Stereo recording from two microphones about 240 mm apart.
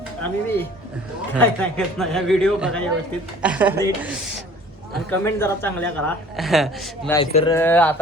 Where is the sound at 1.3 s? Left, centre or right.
Centre.